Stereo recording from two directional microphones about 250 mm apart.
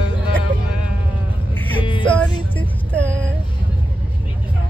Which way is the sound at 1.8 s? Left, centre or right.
Centre.